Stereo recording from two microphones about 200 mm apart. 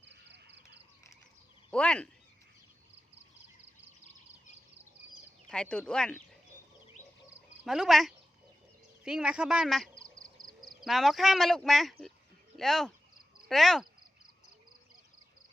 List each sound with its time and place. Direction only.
0.0 s a sound: 60° right (ahead or behind)
1.7 s speech: 5° left (ahead or behind)
5.5 s speech: 5° left (ahead or behind)
7.6 s speech: centre (ahead or behind)
10.4 s frog: 20° right (ahead or behind)
10.8 s speech: centre (ahead or behind)